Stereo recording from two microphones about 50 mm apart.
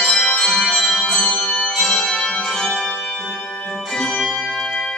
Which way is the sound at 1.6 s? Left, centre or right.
Centre.